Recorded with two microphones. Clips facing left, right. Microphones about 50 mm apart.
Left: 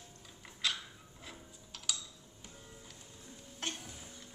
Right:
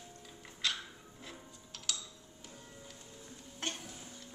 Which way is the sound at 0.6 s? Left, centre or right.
Centre.